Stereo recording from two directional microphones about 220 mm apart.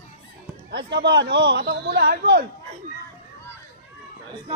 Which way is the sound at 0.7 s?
50° right (ahead or behind).